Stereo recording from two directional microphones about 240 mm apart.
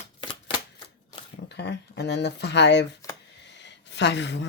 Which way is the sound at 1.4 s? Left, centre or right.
Left.